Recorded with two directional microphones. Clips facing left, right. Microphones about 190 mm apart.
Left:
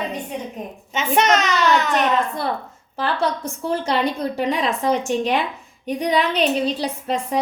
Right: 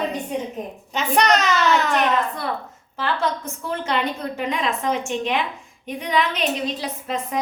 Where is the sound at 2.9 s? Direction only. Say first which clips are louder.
Left 2 dB; 35° left (ahead or behind).